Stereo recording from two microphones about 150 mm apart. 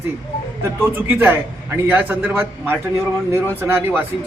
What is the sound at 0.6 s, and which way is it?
A man's voice, 15° right (ahead or behind).